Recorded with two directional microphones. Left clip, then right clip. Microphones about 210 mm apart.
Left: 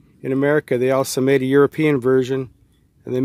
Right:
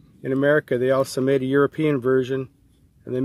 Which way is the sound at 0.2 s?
40° left (ahead or behind).